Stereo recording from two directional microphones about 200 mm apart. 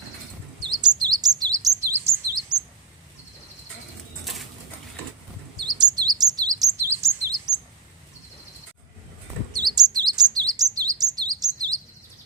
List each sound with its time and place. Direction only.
0.6 s chirp: 20° right (ahead or behind)
2.5 s bird: 20° right (ahead or behind)
5.5 s chirp: 20° right (ahead or behind)
9.7 s chirp: 20° right (ahead or behind)